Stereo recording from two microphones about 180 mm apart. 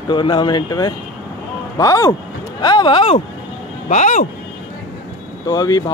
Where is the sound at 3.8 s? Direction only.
40° left (ahead or behind).